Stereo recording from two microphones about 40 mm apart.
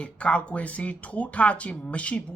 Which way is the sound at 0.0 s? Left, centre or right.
Left.